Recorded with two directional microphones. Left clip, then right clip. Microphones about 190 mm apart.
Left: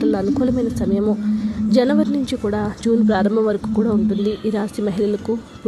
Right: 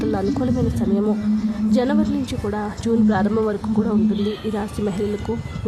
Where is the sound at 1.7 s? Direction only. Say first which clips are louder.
Left 4 dB; 10° left (ahead or behind).